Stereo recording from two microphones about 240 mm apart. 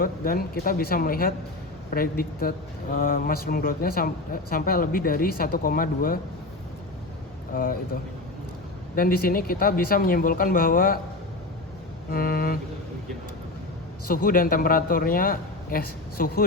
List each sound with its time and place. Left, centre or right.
0.0 s speech: left
7.5 s speech: left
9.0 s speech: left
12.1 s speech: left
14.1 s speech: left